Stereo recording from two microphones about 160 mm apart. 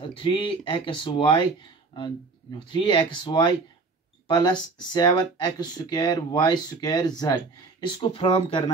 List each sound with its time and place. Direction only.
0.1 s speech: 30° left (ahead or behind)